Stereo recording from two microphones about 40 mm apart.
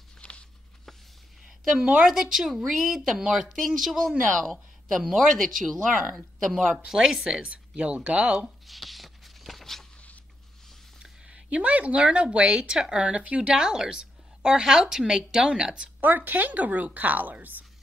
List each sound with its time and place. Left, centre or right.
0.2 s a sound: left
1.4 s a sound: centre
2.0 s a woman's voice: centre
3.6 s speech: centre
6.9 s a woman's voice: centre
7.2 s a woman's voice: right
8.6 s a sound: centre
11.2 s a woman's voice: right
13.5 s a woman's voice: centre
16.0 s speech: right